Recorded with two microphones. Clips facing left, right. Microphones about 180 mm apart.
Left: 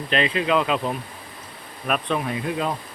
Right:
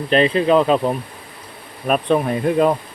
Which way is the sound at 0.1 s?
40° right (ahead or behind).